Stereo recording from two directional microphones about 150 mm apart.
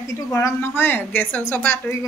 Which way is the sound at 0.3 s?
15° left (ahead or behind).